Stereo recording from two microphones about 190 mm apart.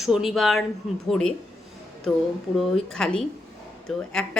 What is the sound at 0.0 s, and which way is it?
A woman's voice, centre (ahead or behind).